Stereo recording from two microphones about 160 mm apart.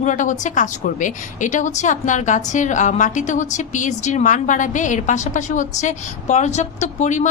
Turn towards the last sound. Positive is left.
turn(degrees=50)  # may be behind; listen again after turning